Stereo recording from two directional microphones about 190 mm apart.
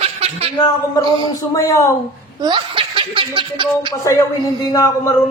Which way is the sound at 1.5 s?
20° left (ahead or behind).